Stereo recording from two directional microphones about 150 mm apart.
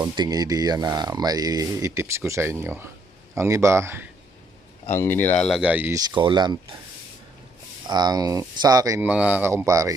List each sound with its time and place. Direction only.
0.0 s speech: 25° right (ahead or behind)
4.9 s speech: 15° left (ahead or behind); by 5.9 s 10° right (ahead or behind)
5.9 s speech: 30° right (ahead or behind)
7.9 s speech: 25° right (ahead or behind)
9.0 s speech: 10° right (ahead or behind)